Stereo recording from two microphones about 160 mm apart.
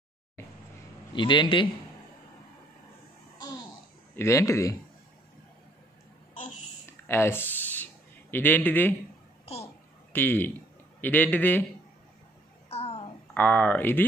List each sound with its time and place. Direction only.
1.1 s a man's voice: 30° left (ahead or behind)
4.2 s speech: 20° left (ahead or behind)
6.9 s a sound: 15° left (ahead or behind)
10.1 s speech: 10° left (ahead or behind)
12.6 s music: 40° left (ahead or behind)
13.3 s speech: 10° left (ahead or behind)